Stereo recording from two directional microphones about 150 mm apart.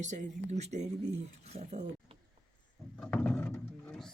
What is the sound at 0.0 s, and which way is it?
Speech, 50° right (ahead or behind).